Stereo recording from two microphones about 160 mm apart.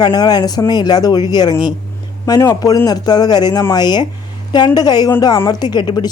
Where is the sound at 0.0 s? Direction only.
25° left (ahead or behind).